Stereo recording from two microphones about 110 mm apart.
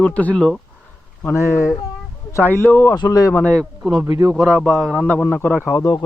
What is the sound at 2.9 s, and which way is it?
Speech, 35° left (ahead or behind).